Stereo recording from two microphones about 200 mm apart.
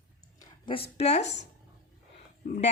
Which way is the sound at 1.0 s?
35° left (ahead or behind).